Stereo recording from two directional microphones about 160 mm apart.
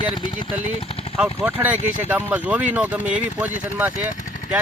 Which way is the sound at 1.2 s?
10° right (ahead or behind).